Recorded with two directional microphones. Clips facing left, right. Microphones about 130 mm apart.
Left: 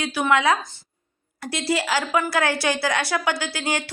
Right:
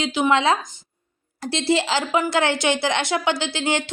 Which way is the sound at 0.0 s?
20° right (ahead or behind).